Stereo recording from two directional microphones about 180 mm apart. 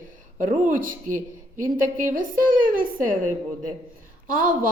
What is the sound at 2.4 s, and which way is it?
Speech, 50° right (ahead or behind).